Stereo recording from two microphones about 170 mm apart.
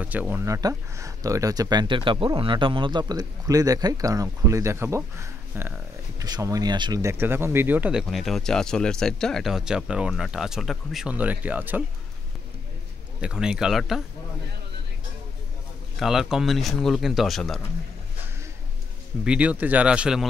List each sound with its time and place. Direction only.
0.0 s speech: 10° right (ahead or behind)
13.2 s speech: 5° right (ahead or behind)
16.0 s speech: centre (ahead or behind)
19.2 s speech: 5° right (ahead or behind)